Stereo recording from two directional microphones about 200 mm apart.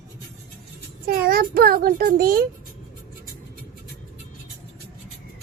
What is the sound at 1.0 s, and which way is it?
A child's voice, 50° right (ahead or behind).